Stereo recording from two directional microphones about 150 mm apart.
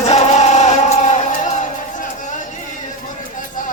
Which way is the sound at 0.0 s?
50° left (ahead or behind).